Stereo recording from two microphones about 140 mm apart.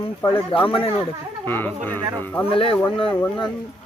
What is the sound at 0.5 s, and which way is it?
Speech, 40° left (ahead or behind).